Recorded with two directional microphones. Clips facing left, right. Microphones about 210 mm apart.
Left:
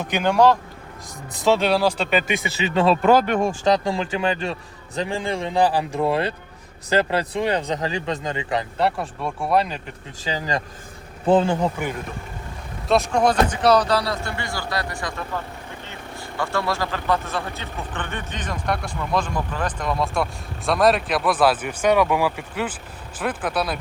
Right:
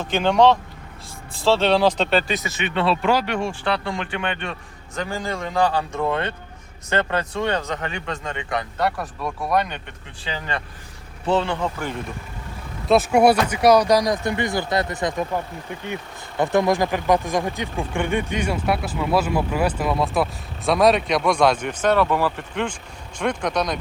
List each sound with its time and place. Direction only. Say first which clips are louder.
0.2 s speech: right 1 dB; 5° left (ahead or behind)
2.8 s speech: left 4 dB; 45° left (ahead or behind)
3.9 s speech: left 4 dB; 35° left (ahead or behind)
12.9 s speech: right 3 dB; 5° right (ahead or behind)
16.4 s speech: right 6 dB; 20° right (ahead or behind); by 23.7 s 5° left (ahead or behind)